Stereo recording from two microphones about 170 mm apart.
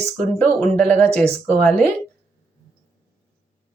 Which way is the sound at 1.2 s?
40° right (ahead or behind).